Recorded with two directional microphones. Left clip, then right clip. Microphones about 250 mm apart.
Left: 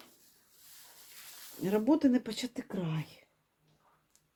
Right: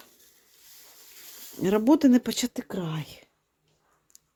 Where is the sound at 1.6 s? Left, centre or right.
Right.